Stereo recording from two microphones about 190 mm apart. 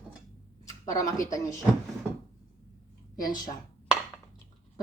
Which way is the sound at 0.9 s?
20° left (ahead or behind).